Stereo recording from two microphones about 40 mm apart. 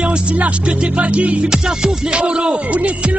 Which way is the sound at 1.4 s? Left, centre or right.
Centre.